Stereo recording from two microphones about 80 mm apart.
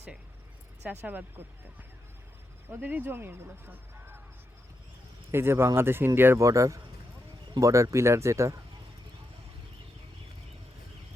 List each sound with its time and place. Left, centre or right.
0.9 s speech: right
2.6 s speech: right
5.3 s speech: right
6.4 s speech: right